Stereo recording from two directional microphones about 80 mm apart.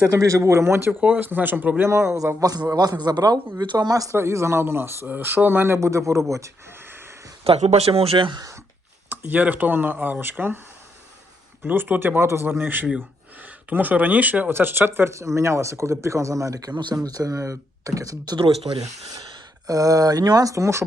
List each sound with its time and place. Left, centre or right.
0.1 s speech: right
0.9 s speech: centre
1.8 s speech: right
4.1 s speech: right
6.7 s wheeze: right
8.4 s speech: right
9.0 s speech: right
11.6 s speech: right
19.6 s speech: right